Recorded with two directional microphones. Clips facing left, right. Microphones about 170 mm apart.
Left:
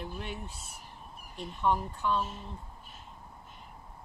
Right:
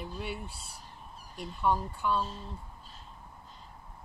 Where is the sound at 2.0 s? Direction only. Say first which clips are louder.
Even; 5° right (ahead or behind).